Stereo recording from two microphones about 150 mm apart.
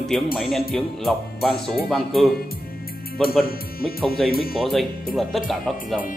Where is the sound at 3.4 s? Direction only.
85° left.